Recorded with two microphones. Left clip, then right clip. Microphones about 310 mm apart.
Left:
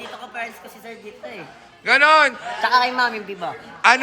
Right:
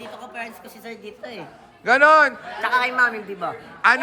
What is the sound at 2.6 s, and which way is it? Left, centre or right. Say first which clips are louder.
Speech: left 1 dB; left.